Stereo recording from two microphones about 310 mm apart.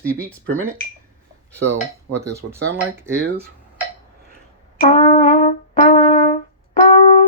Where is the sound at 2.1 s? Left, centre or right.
Centre.